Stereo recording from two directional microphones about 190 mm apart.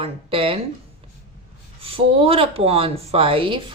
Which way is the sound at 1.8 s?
30° right (ahead or behind).